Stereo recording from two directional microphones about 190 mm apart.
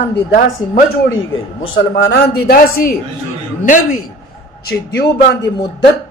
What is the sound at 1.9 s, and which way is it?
Speech, 55° left (ahead or behind).